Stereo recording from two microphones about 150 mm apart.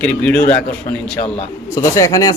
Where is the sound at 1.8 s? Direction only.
20° left (ahead or behind).